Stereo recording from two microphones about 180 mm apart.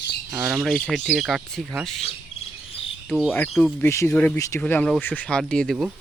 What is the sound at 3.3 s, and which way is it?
Speech, 10° left (ahead or behind).